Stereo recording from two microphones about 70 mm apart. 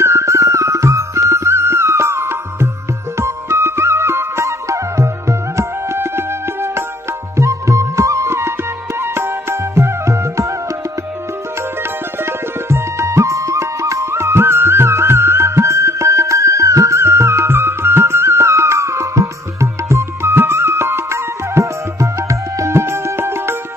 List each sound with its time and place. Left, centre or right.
0.0 s music: right
11.8 s music: right